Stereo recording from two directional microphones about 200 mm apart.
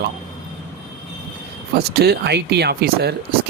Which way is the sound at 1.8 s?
55° right (ahead or behind).